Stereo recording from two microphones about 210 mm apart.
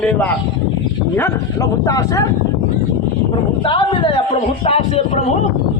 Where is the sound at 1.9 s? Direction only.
15° left (ahead or behind).